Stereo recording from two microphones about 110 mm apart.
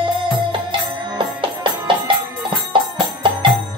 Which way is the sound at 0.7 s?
45° right (ahead or behind).